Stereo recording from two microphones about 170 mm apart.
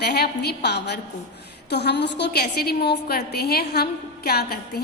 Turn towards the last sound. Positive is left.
turn(degrees=65)  # may be behind; listen again after turning